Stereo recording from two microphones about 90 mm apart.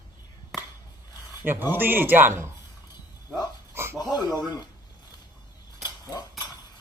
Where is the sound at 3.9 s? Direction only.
45° left (ahead or behind).